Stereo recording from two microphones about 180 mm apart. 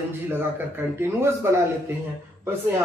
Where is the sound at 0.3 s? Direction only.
10° right (ahead or behind).